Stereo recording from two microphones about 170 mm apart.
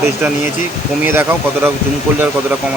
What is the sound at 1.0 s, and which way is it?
Speech, 10° right (ahead or behind).